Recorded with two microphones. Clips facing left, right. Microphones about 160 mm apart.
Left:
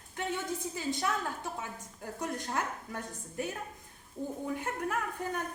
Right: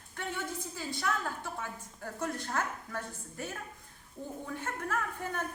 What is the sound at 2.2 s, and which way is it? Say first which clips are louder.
A woman's voice: even; 20° left (ahead or behind).